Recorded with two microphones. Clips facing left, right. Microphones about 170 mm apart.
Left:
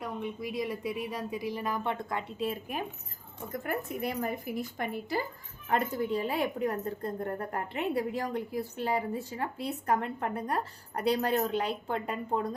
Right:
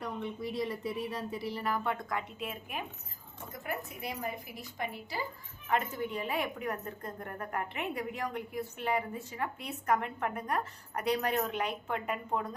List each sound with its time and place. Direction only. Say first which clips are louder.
0.0 s a woman's voice: left 1 dB; 10° left (ahead or behind); by 2.8 s 35° left (ahead or behind)
3.5 s a woman's voice: left 6 dB; 50° left (ahead or behind)
5.6 s a woman's voice: left 3 dB; 35° left (ahead or behind)